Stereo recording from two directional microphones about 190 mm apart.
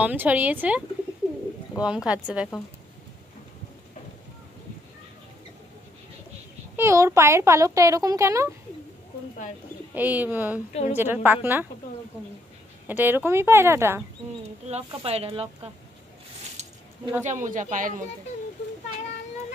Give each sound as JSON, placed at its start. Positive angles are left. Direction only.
{"t": 0.0, "sound": "speech", "side_deg": -10}
{"t": 6.8, "sound": "speech", "side_deg": -15}
{"t": 9.9, "sound": "speech", "side_deg": -10}
{"t": 10.7, "sound": "a woman's voice", "side_deg": 35}
{"t": 11.2, "sound": "speech", "side_deg": -10}
{"t": 12.8, "sound": "speech", "side_deg": -10}
{"t": 14.4, "sound": "speech", "side_deg": -35}
{"t": 17.2, "sound": "speech", "side_deg": -40}